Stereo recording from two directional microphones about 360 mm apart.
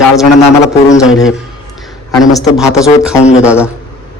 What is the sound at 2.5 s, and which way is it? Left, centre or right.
Speech, centre.